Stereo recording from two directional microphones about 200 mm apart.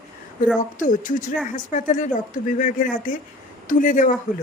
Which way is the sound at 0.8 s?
40° left (ahead or behind).